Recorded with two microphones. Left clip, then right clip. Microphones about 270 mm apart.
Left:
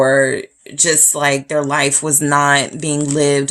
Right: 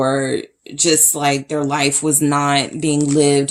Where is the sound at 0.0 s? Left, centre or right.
Left.